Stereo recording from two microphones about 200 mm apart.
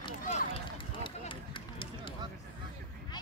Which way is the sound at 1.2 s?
25° left (ahead or behind).